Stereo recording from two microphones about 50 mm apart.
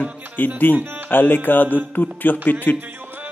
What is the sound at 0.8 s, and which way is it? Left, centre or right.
Speech, right.